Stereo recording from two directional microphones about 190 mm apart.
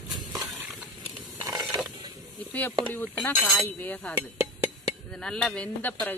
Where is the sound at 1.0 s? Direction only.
25° right (ahead or behind).